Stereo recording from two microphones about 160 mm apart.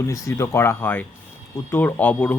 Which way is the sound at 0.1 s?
20° left (ahead or behind).